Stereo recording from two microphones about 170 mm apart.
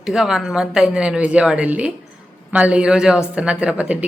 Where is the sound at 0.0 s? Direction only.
Centre (ahead or behind).